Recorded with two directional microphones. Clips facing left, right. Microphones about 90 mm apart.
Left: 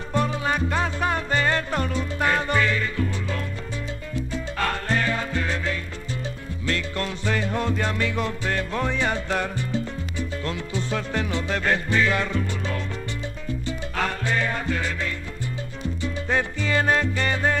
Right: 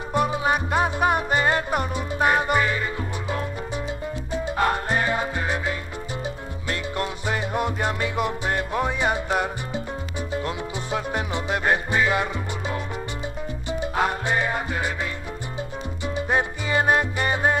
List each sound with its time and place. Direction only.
0.1 s music: 15° right (ahead or behind)
13.7 s salsa music: 20° right (ahead or behind)
16.2 s music: 20° right (ahead or behind)